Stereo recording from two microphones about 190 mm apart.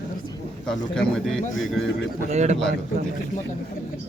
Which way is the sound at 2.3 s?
35° right (ahead or behind).